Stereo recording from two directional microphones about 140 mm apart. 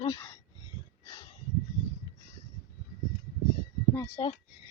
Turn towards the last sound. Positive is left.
turn(degrees=30)  # may be behind; listen again after turning